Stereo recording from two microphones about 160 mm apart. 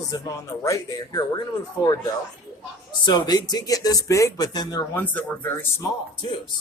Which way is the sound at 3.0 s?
25° left (ahead or behind).